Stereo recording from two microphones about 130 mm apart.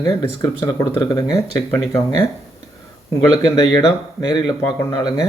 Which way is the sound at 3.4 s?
30° left (ahead or behind).